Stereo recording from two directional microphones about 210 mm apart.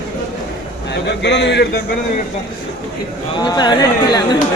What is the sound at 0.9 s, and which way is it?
Speech, 55° left (ahead or behind).